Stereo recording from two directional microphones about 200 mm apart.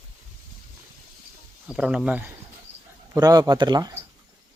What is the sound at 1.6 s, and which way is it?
Speech, 5° right (ahead or behind).